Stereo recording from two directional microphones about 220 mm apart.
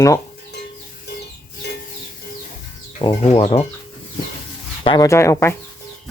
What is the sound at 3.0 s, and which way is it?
Speech, 20° left (ahead or behind).